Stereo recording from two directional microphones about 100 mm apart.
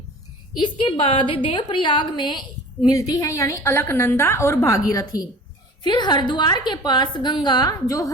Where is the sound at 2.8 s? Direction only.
40° left (ahead or behind).